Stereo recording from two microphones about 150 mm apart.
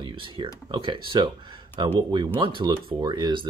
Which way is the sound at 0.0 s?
35° right (ahead or behind).